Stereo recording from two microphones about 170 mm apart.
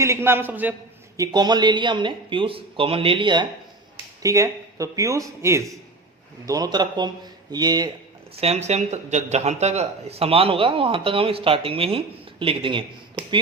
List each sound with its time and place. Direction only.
0.0 s a man's voice: 15° right (ahead or behind)
1.2 s speech: 25° right (ahead or behind)
8.4 s speech: 40° right (ahead or behind)